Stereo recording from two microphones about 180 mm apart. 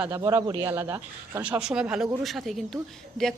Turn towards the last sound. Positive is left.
turn(degrees=0)  # may be behind; listen again after turning